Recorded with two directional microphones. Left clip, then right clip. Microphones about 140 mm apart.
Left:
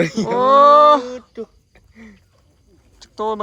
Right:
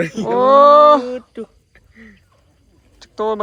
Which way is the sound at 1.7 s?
40° left (ahead or behind).